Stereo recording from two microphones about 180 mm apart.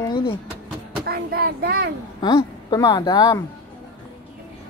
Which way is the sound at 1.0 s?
60° right (ahead or behind).